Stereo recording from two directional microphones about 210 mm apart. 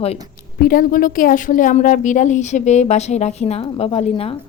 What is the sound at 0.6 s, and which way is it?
A woman's voice, 45° left (ahead or behind).